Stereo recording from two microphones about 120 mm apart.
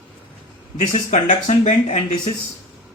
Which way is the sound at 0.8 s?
85° left.